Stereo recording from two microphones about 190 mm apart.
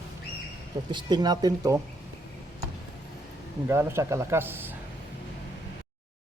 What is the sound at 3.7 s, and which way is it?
Speech, 15° right (ahead or behind).